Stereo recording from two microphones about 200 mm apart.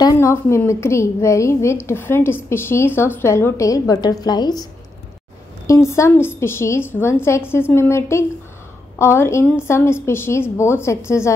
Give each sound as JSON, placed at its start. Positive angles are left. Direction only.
{"t": 0.0, "sound": "a woman's voice", "side_deg": 15}
{"t": 5.7, "sound": "a woman's voice", "side_deg": 15}